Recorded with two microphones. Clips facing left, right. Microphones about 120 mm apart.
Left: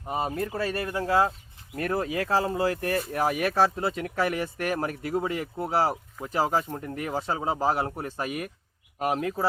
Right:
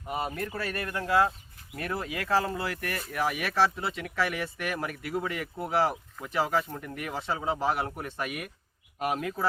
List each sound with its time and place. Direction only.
0.1 s speech: 30° left (ahead or behind)